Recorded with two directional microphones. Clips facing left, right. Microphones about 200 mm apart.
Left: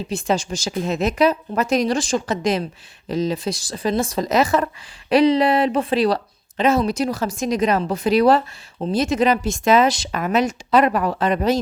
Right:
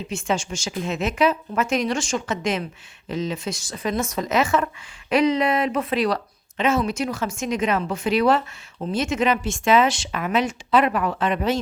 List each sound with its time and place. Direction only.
0.1 s speech: 35° left (ahead or behind)